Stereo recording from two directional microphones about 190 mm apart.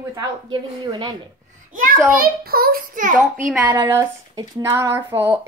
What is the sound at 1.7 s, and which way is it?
A child's voice, 45° right (ahead or behind).